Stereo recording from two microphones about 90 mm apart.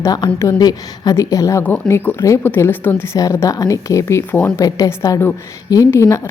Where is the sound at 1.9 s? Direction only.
25° left (ahead or behind).